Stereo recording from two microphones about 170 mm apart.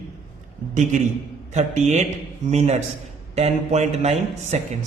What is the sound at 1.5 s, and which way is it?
A man's voice, 40° right (ahead or behind).